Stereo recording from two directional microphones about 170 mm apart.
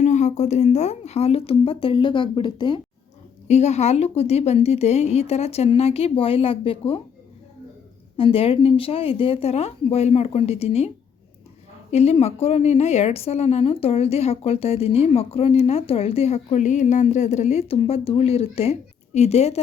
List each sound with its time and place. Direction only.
0.0 s a woman's voice: 45° left (ahead or behind); by 2.8 s 25° left (ahead or behind)
3.4 s a woman's voice: 40° left (ahead or behind)
8.1 s a woman's voice: 35° left (ahead or behind)